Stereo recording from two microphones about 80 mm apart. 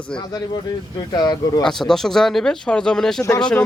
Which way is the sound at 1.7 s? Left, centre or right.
Centre.